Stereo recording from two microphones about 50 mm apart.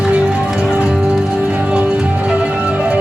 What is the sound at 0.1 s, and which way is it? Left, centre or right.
Music, right.